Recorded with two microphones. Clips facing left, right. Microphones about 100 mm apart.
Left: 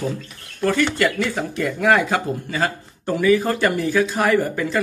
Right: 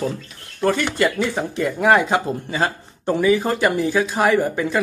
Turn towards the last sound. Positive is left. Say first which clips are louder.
# right 1 dB
turn(degrees=-20)  # may be behind; listen again after turning